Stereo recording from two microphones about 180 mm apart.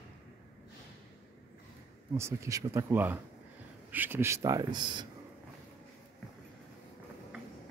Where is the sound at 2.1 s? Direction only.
15° right (ahead or behind).